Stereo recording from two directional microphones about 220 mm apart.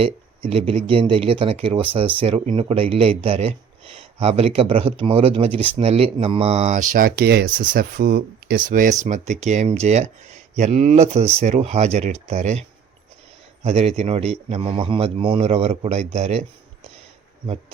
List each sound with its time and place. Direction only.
0.0 s speech: 25° right (ahead or behind)
13.7 s speech: 30° right (ahead or behind)